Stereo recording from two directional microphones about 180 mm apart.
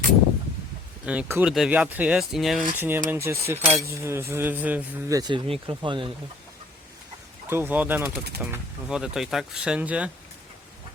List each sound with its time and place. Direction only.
1.0 s speech: 10° right (ahead or behind)
2.7 s speech: 10° right (ahead or behind); by 6.1 s 25° right (ahead or behind)
7.5 s speech: 10° right (ahead or behind)